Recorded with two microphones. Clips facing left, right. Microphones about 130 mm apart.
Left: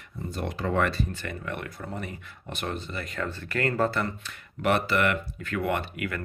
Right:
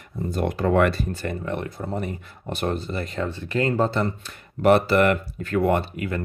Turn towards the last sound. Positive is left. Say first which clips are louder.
# right 6 dB
turn(degrees=-30)  # may be behind; listen again after turning